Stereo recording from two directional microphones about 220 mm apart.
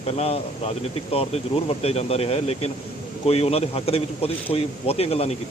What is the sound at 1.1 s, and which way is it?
Speech, 25° left (ahead or behind).